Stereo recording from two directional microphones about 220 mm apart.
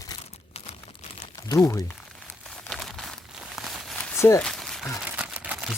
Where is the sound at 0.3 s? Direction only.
30° left (ahead or behind).